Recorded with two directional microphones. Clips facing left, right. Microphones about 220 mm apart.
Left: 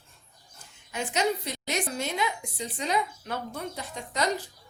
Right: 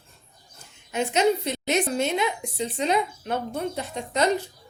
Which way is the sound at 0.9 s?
25° right (ahead or behind).